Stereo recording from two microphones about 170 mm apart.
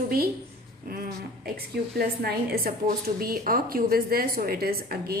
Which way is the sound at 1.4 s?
65° right (ahead or behind).